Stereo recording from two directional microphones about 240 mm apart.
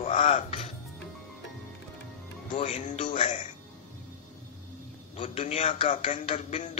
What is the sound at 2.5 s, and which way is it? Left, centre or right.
Speech, left.